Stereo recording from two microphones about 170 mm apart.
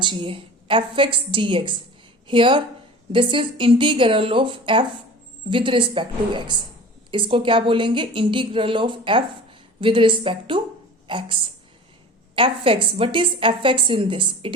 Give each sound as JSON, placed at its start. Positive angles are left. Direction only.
{"t": 0.0, "sound": "a woman's voice", "side_deg": -30}
{"t": 12.4, "sound": "a woman's voice", "side_deg": -30}